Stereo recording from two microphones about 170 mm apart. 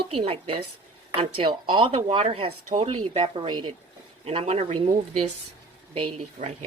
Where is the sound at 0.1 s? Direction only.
35° right (ahead or behind).